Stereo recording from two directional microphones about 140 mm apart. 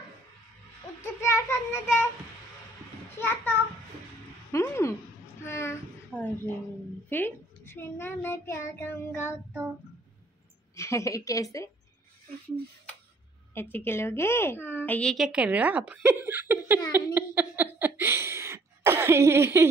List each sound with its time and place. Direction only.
1.0 s child singing: 20° left (ahead or behind)
3.2 s a child's voice: 15° left (ahead or behind)
5.4 s a sound: 20° left (ahead or behind)
7.1 s a child's voice: 15° left (ahead or behind)
10.8 s a woman's voice: 20° left (ahead or behind)
13.6 s a woman's voice: 15° left (ahead or behind); by 16.8 s 15° right (ahead or behind)
16.9 s a sound: 15° right (ahead or behind)